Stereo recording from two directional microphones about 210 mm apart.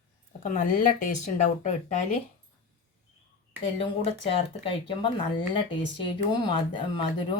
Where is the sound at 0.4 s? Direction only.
40° left (ahead or behind).